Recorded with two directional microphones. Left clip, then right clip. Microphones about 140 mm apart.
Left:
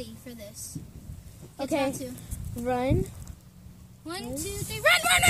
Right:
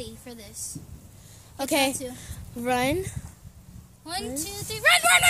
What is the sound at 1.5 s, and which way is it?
A woman's voice, 30° right (ahead or behind).